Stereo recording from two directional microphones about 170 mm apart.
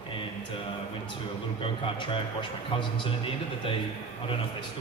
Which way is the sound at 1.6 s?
30° left (ahead or behind).